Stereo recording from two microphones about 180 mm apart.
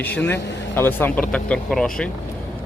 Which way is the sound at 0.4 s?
75° left (ahead or behind).